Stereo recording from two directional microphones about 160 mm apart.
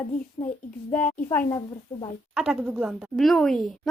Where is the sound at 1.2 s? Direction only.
20° left (ahead or behind).